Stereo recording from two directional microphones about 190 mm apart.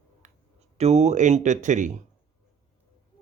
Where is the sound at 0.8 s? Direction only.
35° right (ahead or behind).